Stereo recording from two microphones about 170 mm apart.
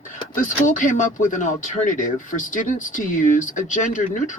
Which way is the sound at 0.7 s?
50° left (ahead or behind).